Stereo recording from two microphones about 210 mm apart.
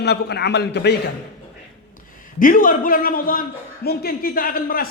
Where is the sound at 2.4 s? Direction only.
40° left (ahead or behind).